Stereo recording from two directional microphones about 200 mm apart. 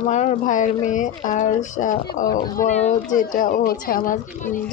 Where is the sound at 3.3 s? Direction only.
45° left (ahead or behind).